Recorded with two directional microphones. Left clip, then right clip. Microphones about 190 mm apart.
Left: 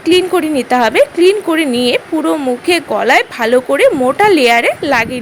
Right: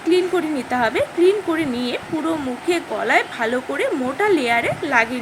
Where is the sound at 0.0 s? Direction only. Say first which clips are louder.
Left 7 dB; 50° left (ahead or behind).